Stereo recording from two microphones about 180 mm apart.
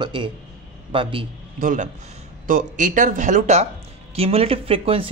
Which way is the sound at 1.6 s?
45° right (ahead or behind).